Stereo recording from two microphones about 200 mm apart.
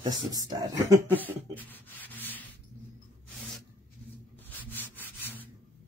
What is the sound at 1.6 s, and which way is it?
Sanding, 10° left (ahead or behind).